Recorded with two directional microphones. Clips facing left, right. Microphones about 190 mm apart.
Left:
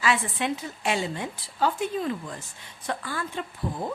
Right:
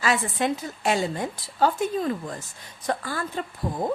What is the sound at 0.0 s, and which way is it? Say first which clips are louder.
A woman's voice: right 2 dB; 40° right (ahead or behind).